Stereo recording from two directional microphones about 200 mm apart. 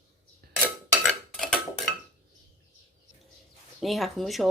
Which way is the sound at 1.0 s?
5° left (ahead or behind).